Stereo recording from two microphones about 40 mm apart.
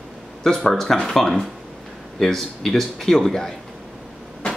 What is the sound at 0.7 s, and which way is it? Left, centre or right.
Speech, centre.